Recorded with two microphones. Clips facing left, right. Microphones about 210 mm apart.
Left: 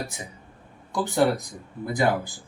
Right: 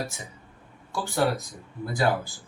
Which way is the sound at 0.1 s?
15° left (ahead or behind).